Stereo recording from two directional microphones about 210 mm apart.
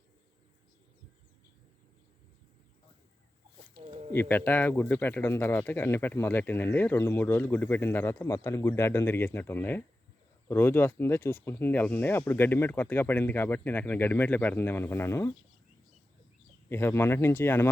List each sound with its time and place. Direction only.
3.8 s a sound: 25° right (ahead or behind)
4.1 s speech: 10° left (ahead or behind)
16.6 s speech: 10° left (ahead or behind)